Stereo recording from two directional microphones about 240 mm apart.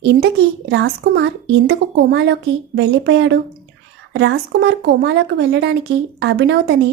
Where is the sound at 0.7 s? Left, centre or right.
Right.